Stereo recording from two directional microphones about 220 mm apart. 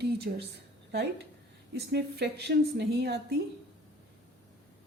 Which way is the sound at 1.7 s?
50° right (ahead or behind).